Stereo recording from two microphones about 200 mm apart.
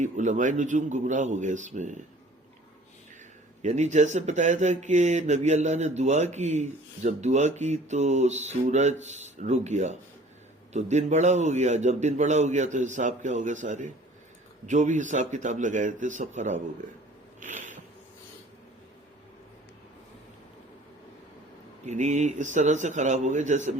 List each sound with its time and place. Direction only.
0.0 s speech: 40° right (ahead or behind)
3.6 s speech: 35° right (ahead or behind)
17.4 s a sound: 40° right (ahead or behind)
21.8 s speech: 35° right (ahead or behind)